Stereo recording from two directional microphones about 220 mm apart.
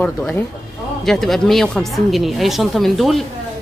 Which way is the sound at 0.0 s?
5° left (ahead or behind).